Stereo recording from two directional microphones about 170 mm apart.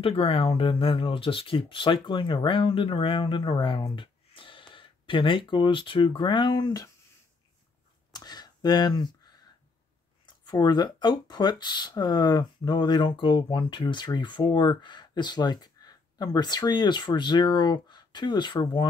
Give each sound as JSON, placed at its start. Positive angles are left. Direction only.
{"t": 0.0, "sound": "speech", "side_deg": 35}
{"t": 8.1, "sound": "a sound", "side_deg": 25}
{"t": 10.2, "sound": "speech", "side_deg": 25}